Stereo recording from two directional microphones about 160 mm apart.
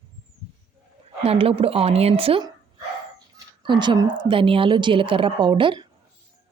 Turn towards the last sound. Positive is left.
turn(degrees=-30)  # may be behind; listen again after turning